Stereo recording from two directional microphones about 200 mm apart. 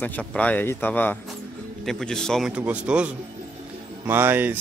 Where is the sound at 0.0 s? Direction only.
10° left (ahead or behind).